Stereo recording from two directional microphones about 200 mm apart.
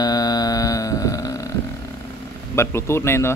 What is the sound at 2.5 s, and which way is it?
Speech, 15° left (ahead or behind).